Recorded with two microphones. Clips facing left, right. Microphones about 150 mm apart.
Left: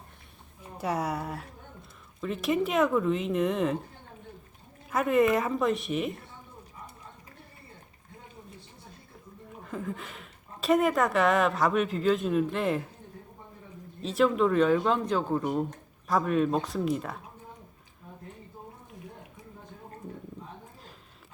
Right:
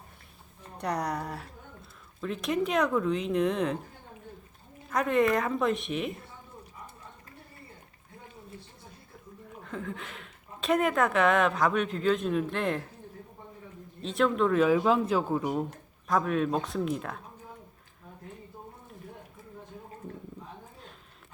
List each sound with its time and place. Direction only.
0.6 s speech: 5° left (ahead or behind)
4.9 s speech: 5° left (ahead or behind)
9.6 s speech: 5° left (ahead or behind)
14.0 s speech: centre (ahead or behind)